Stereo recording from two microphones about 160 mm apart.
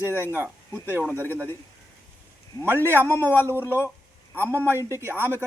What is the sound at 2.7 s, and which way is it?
Speech, 15° right (ahead or behind).